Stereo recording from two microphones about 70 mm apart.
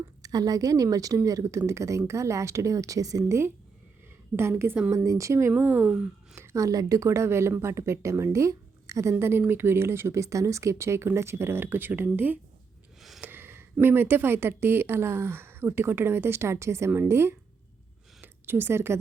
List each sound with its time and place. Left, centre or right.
0.2 s a woman's voice: right
4.9 s a woman's voice: right
13.0 s gasp: centre
13.2 s a sound: right
13.8 s speech: right
18.2 s a sound: right